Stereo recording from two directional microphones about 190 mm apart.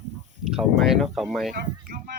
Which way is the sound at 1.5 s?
50° right (ahead or behind).